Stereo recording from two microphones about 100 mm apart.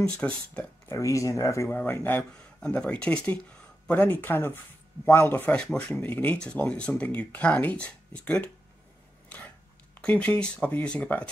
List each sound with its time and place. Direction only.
0.0 s speech: 10° left (ahead or behind)
0.8 s speech: 30° left (ahead or behind)
1.8 s speech: 15° left (ahead or behind)
9.9 s speech: 15° left (ahead or behind)